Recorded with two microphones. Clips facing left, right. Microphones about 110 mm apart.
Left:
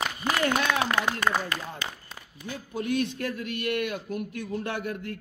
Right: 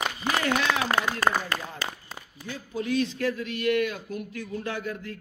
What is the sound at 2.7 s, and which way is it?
Speech, 55° left (ahead or behind).